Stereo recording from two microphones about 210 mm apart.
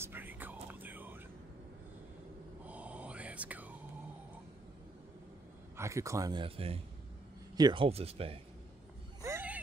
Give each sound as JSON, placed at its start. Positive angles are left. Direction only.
{"t": 0.0, "sound": "whispering", "side_deg": -10}
{"t": 2.6, "sound": "whispering", "side_deg": -5}
{"t": 5.8, "sound": "speech", "side_deg": -15}
{"t": 9.2, "sound": "a sound", "side_deg": -10}